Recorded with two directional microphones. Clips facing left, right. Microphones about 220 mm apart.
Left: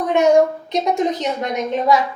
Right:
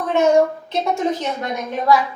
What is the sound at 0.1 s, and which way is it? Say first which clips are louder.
A woman's voice: left 1 dB; 15° left (ahead or behind).